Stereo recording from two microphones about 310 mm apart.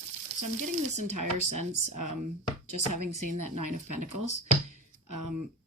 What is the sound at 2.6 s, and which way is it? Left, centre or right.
A woman's voice, right.